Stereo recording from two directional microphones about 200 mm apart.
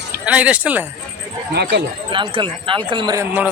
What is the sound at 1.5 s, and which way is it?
Speech, 55° right (ahead or behind).